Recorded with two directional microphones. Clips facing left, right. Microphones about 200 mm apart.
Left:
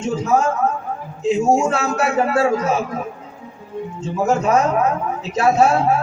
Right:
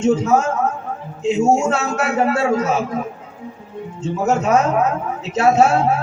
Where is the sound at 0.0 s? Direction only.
25° right (ahead or behind).